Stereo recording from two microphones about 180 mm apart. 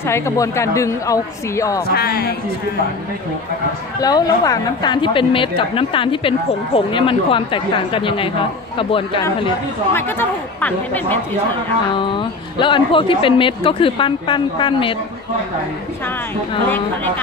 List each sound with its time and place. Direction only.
0.0 s a woman's voice: 15° left (ahead or behind)
1.9 s speech: 60° left (ahead or behind)
4.0 s a woman's voice: 20° left (ahead or behind)
9.9 s a woman's voice: 10° left (ahead or behind)
11.9 s a woman's voice: 25° left (ahead or behind)
16.6 s a woman's voice: 10° left (ahead or behind)